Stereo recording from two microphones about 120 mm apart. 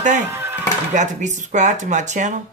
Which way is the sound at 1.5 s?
90° right.